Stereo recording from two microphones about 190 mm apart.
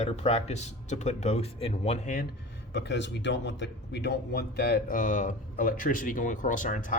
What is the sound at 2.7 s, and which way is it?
Speech, 65° left (ahead or behind).